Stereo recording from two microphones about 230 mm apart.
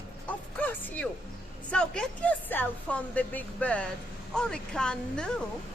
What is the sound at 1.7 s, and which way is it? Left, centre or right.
Speech, centre.